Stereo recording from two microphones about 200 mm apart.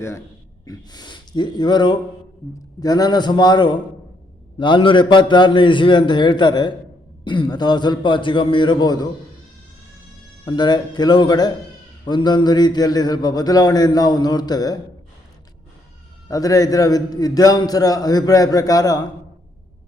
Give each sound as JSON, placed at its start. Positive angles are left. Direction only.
{"t": 0.6, "sound": "a man's voice", "side_deg": 20}
{"t": 10.4, "sound": "a man's voice", "side_deg": 20}
{"t": 16.3, "sound": "a man's voice", "side_deg": 15}